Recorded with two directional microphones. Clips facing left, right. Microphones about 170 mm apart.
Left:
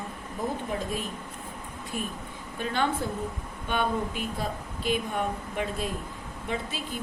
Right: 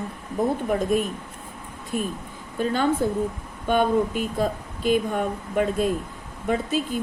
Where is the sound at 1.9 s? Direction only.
Centre (ahead or behind).